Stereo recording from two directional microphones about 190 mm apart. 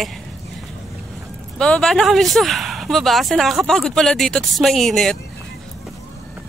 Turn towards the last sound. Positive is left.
turn(degrees=0)  # may be behind; listen again after turning